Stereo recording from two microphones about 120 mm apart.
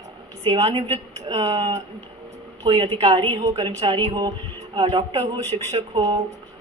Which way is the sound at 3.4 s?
55° right (ahead or behind).